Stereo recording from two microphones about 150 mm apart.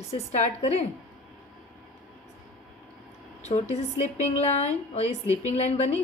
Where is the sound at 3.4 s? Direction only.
50° left (ahead or behind).